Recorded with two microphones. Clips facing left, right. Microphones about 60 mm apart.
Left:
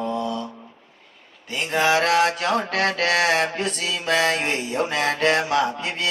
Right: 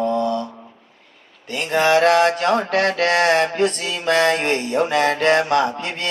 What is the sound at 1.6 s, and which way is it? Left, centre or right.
Music, centre.